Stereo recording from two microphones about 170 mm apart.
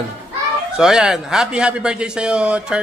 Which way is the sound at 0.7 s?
5° right (ahead or behind).